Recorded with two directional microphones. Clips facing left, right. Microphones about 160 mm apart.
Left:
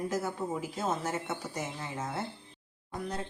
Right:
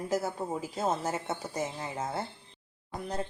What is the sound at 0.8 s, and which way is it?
A woman's voice, 30° right (ahead or behind).